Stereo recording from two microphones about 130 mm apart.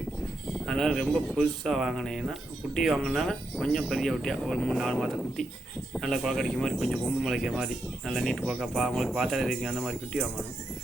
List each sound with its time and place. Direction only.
0.6 s speech: centre (ahead or behind)